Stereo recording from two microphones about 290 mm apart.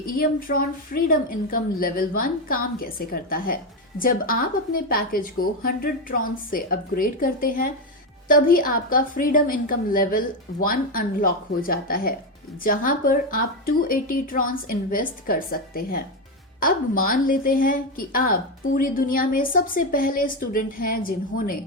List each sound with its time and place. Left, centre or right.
0.0 s speech: left